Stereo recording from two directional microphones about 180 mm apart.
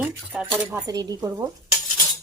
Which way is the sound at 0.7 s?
20° right (ahead or behind).